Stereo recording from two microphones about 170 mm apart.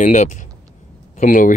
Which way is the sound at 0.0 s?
45° left (ahead or behind).